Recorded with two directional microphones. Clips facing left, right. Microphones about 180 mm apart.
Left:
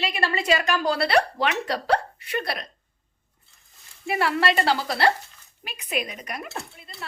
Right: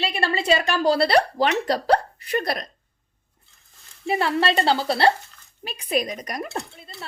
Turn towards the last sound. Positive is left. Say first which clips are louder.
# right 4 dB
turn(degrees=-30)  # may be behind; listen again after turning